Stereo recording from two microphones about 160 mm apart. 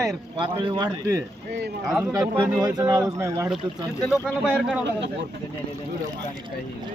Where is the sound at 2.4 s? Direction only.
25° right (ahead or behind).